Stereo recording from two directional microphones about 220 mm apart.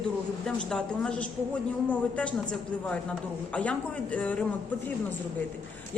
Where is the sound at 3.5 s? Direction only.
5° left (ahead or behind).